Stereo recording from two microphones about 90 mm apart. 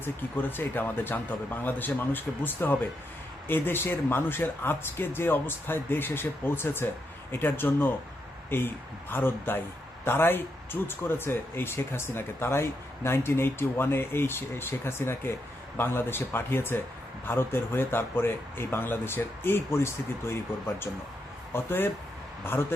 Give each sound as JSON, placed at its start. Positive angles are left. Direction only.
{"t": 0.0, "sound": "speech", "side_deg": 25}